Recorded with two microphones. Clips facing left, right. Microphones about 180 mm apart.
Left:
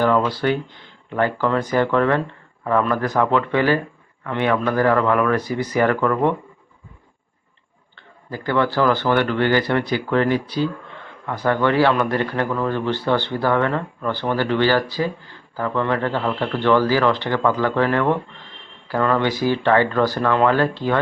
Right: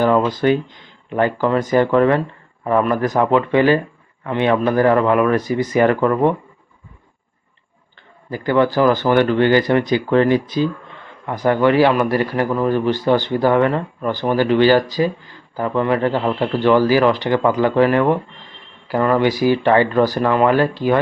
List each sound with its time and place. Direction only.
0.3 s a man's voice: 15° right (ahead or behind)
8.3 s a man's voice: 15° right (ahead or behind)